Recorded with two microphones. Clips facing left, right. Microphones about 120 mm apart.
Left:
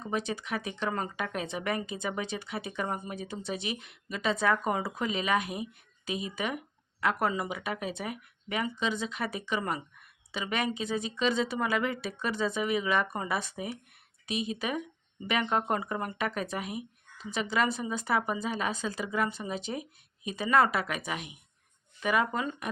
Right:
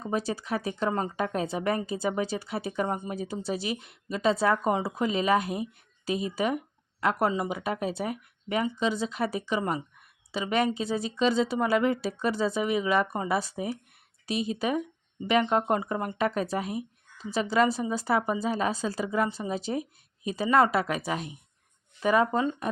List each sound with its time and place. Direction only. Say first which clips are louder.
0.1 s speech: right 3 dB; 35° right (ahead or behind)